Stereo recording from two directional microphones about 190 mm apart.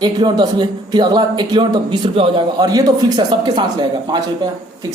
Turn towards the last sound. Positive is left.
turn(degrees=-25)  # may be behind; listen again after turning